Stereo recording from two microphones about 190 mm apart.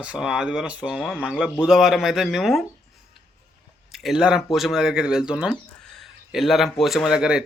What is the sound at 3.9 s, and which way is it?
Speech, centre (ahead or behind).